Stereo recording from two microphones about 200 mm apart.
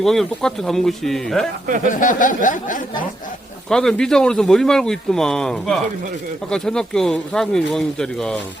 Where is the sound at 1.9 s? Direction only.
40° left (ahead or behind).